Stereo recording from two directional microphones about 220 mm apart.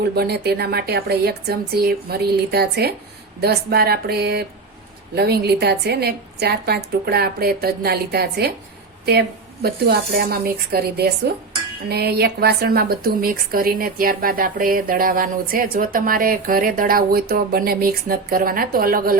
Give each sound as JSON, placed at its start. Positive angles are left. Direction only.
{"t": 0.2, "sound": "a woman's voice", "side_deg": -45}